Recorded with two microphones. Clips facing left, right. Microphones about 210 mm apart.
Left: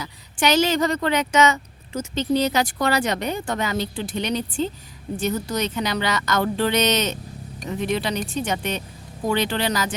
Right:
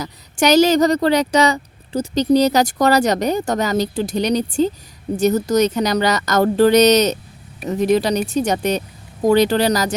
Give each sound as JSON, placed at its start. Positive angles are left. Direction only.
{"t": 0.0, "sound": "speech", "side_deg": -40}